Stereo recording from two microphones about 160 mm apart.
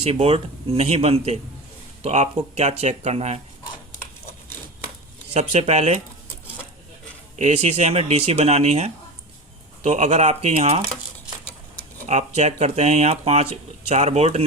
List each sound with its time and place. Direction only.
0.0 s speech: 40° right (ahead or behind)
5.3 s speech: 45° right (ahead or behind)
7.3 s speech: 45° right (ahead or behind)
12.0 s speech: 45° right (ahead or behind)